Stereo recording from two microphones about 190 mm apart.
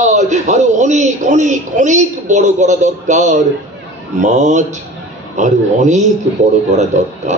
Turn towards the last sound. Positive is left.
turn(degrees=-35)  # may be behind; listen again after turning